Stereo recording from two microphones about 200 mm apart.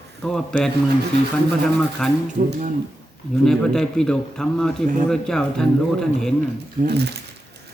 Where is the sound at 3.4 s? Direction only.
Centre (ahead or behind).